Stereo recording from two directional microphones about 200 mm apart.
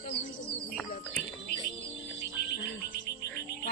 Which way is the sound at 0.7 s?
5° left (ahead or behind).